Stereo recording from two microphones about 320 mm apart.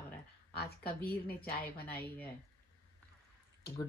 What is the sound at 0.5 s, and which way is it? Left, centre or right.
Speech, left.